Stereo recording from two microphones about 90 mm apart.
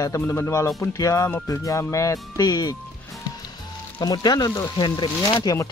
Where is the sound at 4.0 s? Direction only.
50° left (ahead or behind).